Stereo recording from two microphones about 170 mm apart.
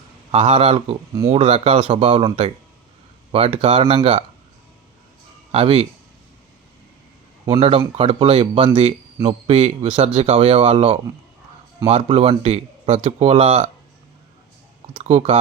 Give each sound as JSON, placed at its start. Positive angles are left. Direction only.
{"t": 0.3, "sound": "speech", "side_deg": -35}
{"t": 5.5, "sound": "speech", "side_deg": -35}
{"t": 7.4, "sound": "speech", "side_deg": -35}
{"t": 15.0, "sound": "speech", "side_deg": -40}